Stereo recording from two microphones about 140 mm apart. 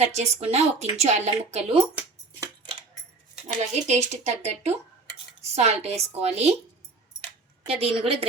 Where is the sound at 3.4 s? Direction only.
55° right (ahead or behind).